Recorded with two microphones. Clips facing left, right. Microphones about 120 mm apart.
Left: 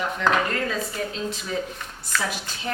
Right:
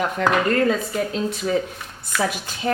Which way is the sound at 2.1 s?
10° right (ahead or behind).